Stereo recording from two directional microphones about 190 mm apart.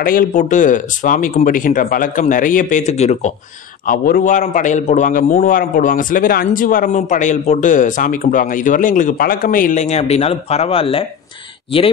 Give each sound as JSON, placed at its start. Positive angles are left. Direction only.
{"t": 0.0, "sound": "speech", "side_deg": 45}
{"t": 3.8, "sound": "speech", "side_deg": 50}